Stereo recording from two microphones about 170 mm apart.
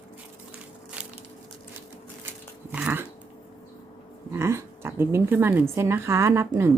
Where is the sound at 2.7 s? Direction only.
10° right (ahead or behind).